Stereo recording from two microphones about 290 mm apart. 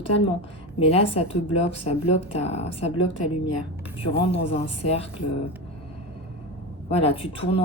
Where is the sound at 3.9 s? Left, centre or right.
Centre.